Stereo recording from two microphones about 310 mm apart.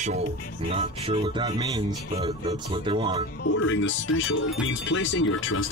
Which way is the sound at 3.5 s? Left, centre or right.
Left.